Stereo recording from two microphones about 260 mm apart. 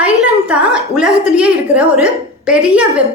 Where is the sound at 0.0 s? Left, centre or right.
Centre.